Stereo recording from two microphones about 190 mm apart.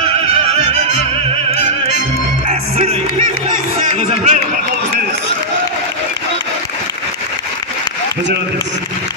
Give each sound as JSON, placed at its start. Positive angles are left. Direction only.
{"t": 2.4, "sound": "music", "side_deg": -35}